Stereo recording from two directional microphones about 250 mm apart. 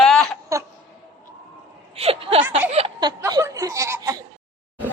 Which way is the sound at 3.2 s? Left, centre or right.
Centre.